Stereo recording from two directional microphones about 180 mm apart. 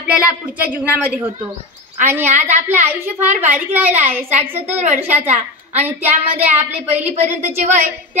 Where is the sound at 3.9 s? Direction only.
35° right (ahead or behind).